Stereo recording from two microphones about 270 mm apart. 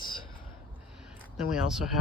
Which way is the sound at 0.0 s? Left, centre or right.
Centre.